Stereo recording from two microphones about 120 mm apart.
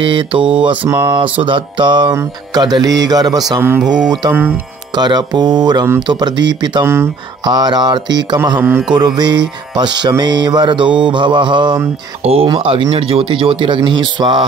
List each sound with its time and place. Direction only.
0.0 s speech: 45° right (ahead or behind)
0.8 s music: 40° right (ahead or behind)
3.8 s mantra: 5° right (ahead or behind)
4.3 s speech: 15° right (ahead or behind)
4.9 s music: 35° right (ahead or behind)
6.8 s speech: 20° right (ahead or behind)
7.4 s music: 35° right (ahead or behind)
8.5 s speech: 15° right (ahead or behind)
8.9 s music: 35° right (ahead or behind)
11.1 s speech: 40° right (ahead or behind)
12.2 s speech: 55° right (ahead or behind)
12.4 s speech: 45° right (ahead or behind)
13.8 s music: 40° right (ahead or behind)